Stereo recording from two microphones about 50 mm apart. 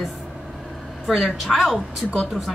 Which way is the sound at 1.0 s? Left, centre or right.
Centre.